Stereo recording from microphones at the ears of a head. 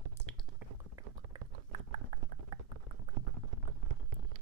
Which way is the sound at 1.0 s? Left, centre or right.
Right.